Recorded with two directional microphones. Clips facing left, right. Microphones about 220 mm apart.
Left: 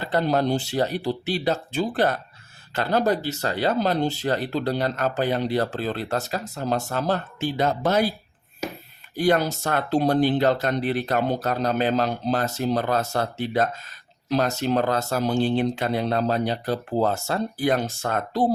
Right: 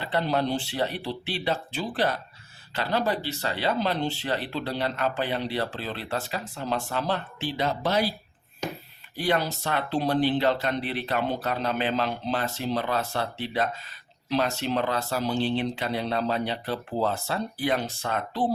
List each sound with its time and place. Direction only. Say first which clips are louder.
0.0 s speech: left 4 dB; 45° left (ahead or behind)
9.1 s speech: left 5 dB; 45° left (ahead or behind)